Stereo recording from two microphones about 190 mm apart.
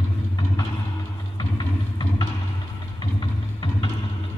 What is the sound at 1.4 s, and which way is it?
Clip-clop, 20° left (ahead or behind).